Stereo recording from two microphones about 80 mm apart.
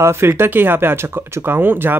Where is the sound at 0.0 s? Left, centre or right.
Right.